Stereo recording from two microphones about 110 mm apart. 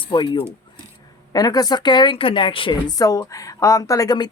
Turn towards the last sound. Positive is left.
turn(degrees=40)  # may be behind; listen again after turning